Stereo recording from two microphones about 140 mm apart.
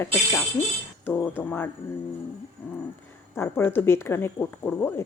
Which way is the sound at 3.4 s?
15° left (ahead or behind).